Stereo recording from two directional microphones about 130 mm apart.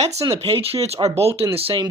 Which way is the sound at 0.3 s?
50° right (ahead or behind).